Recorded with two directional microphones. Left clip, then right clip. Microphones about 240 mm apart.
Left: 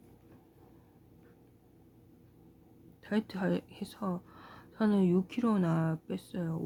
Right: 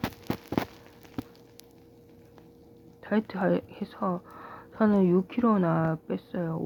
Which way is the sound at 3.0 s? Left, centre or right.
Centre.